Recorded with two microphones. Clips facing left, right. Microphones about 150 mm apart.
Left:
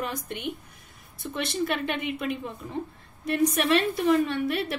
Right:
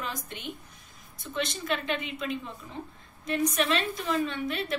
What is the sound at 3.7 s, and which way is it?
A woman's voice, 60° left (ahead or behind).